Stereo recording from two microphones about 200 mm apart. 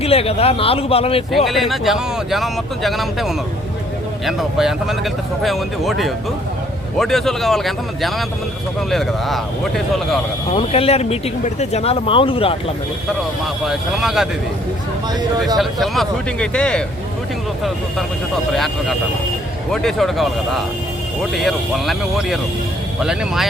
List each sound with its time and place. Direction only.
0.0 s speech: 30° left (ahead or behind)
1.5 s speech: centre (ahead or behind)
10.5 s speech: 30° left (ahead or behind)
13.7 s speech: centre (ahead or behind)
15.5 s speech: centre (ahead or behind)
18.5 s speech: centre (ahead or behind)
21.3 s speech: centre (ahead or behind)